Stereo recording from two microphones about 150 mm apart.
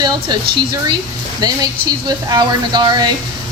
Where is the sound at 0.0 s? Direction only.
30° right (ahead or behind).